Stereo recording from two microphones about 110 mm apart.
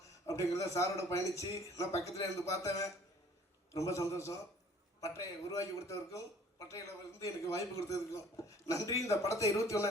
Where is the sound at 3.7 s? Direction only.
30° left (ahead or behind).